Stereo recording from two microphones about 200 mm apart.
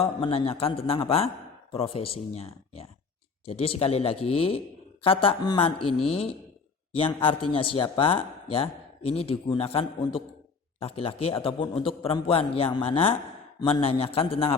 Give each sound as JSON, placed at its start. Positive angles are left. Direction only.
{"t": 0.0, "sound": "a man's voice", "side_deg": 30}